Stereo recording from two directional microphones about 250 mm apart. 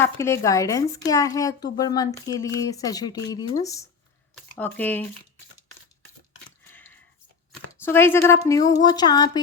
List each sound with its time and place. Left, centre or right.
0.0 s speech: centre
7.7 s speech: centre